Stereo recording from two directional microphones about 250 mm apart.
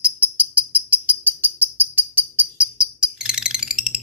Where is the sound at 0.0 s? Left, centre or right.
Centre.